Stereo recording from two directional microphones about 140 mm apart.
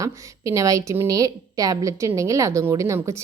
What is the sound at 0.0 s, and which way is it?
A woman's voice, 25° right (ahead or behind).